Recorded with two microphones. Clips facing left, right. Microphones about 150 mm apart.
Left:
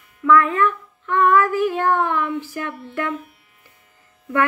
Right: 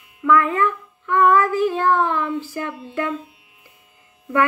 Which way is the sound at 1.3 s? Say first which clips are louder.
Even; 35° right (ahead or behind).